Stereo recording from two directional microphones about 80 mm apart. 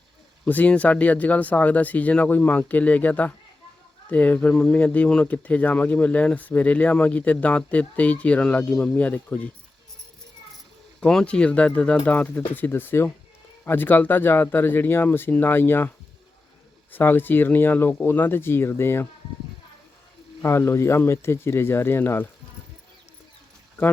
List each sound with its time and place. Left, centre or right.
0.4 s speech: centre
11.0 s speech: centre; by 15.9 s left
16.9 s speech: left
20.4 s speech: left